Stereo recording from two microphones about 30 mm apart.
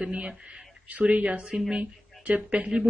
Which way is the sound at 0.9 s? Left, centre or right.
Right.